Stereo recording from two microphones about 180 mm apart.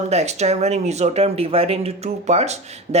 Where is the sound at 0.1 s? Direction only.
35° right (ahead or behind).